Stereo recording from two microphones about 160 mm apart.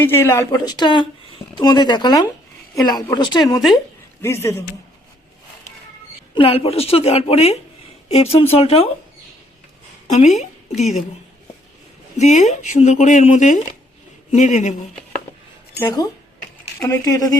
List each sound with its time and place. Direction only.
0.0 s speech: 15° left (ahead or behind)
4.2 s a man's voice: 15° left (ahead or behind)
6.3 s a woman's voice: 35° left (ahead or behind)
10.1 s a woman's voice: 50° left (ahead or behind)
12.1 s speech: 45° left (ahead or behind)
15.8 s speech: 25° left (ahead or behind)